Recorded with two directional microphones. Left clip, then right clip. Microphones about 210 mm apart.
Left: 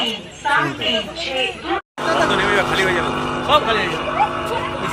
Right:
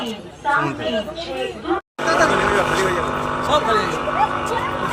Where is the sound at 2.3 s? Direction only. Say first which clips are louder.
Even; 15° right (ahead or behind).